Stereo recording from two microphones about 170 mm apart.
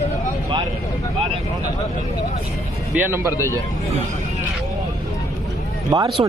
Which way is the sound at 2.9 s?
10° right (ahead or behind).